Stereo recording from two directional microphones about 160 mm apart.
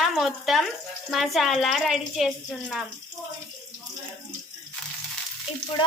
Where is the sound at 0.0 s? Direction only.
Centre (ahead or behind).